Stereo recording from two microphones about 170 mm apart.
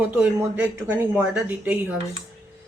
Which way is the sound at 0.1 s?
10° right (ahead or behind).